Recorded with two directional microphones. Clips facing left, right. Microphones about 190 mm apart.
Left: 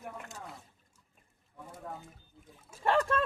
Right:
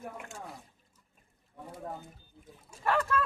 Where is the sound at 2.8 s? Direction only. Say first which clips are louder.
Left 1 dB; 30° left (ahead or behind).